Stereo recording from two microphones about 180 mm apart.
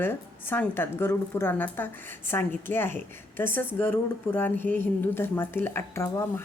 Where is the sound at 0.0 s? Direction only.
10° left (ahead or behind).